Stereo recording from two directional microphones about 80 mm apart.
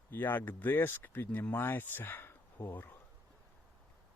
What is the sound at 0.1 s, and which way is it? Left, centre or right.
Speech, left.